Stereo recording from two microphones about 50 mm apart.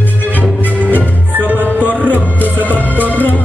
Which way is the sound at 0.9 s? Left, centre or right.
Right.